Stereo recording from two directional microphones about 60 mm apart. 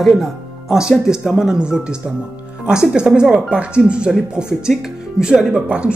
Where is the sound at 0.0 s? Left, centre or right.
Centre.